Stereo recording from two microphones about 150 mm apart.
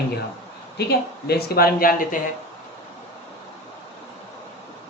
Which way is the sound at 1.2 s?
90° left.